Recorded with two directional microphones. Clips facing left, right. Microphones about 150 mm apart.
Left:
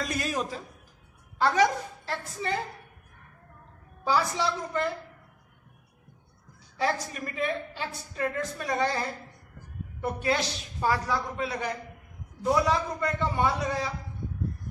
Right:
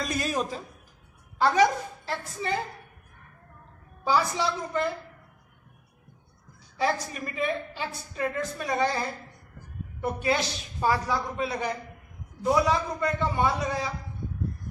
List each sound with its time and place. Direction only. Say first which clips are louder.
0.0 s chuckle: right 2 dB; 25° right (ahead or behind)
1.4 s a woman's voice: right 2 dB; 10° right (ahead or behind)
4.0 s a woman's voice: right 1 dB; 10° right (ahead or behind)
6.8 s a woman's voice: right 1 dB; 10° right (ahead or behind)
10.0 s a woman's voice: right 1 dB; 10° right (ahead or behind)
12.4 s a woman's voice: right 1 dB; 10° right (ahead or behind)